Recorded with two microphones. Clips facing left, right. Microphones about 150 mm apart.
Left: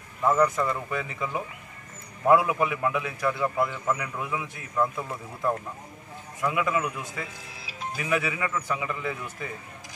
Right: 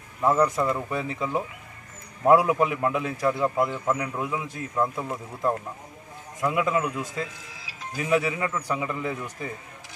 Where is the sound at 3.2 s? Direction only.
20° right (ahead or behind).